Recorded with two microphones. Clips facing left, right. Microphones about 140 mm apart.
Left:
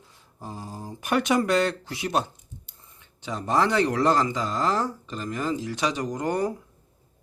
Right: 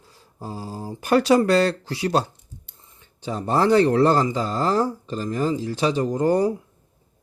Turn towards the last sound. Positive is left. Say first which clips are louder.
# right 6 dB
turn(degrees=-30)  # may be behind; listen again after turning